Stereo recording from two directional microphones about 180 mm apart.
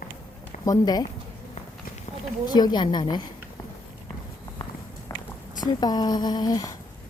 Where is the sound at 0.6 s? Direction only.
20° left (ahead or behind).